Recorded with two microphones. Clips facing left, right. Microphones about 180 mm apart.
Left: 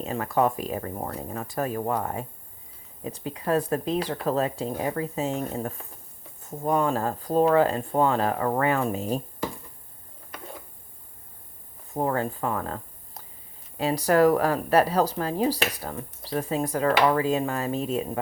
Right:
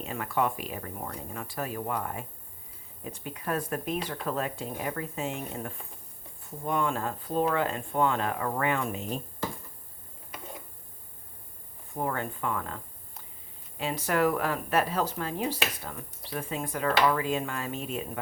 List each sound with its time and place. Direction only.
0.0 s a woman's voice: 35° left (ahead or behind)
11.9 s a woman's voice: 35° left (ahead or behind)